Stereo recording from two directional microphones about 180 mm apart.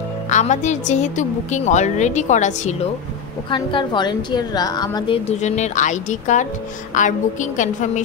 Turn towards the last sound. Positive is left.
turn(degrees=45)  # may be behind; listen again after turning